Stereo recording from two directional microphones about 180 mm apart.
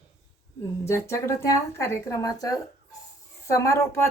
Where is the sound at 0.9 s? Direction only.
15° left (ahead or behind).